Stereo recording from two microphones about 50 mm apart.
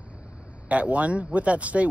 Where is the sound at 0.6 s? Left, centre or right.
Right.